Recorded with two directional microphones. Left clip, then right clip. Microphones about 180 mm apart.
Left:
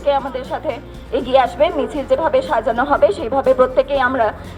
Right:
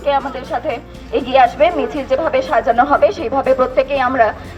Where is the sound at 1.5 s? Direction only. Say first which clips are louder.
Right 2 dB; 20° left (ahead or behind).